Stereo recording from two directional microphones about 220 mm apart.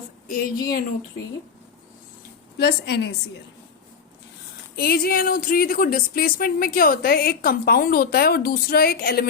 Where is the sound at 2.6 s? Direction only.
45° left (ahead or behind).